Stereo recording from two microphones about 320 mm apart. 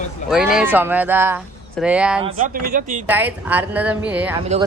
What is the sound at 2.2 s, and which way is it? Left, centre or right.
Speech, right.